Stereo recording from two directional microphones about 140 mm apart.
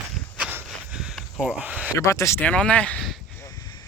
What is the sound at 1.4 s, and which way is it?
Speech, 10° right (ahead or behind).